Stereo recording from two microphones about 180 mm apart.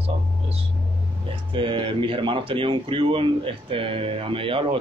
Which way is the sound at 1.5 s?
25° right (ahead or behind).